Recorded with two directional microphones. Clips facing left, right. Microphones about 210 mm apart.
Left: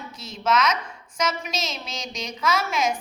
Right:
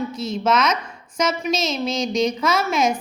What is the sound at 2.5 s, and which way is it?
Speech, 25° right (ahead or behind).